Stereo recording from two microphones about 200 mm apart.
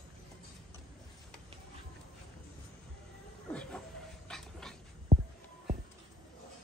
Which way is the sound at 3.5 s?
5° left (ahead or behind).